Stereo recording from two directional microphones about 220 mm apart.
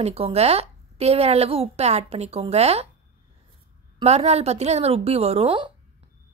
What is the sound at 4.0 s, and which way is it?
Speech, 30° right (ahead or behind).